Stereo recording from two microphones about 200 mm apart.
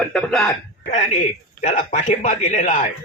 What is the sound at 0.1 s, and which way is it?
Speech, 5° left (ahead or behind).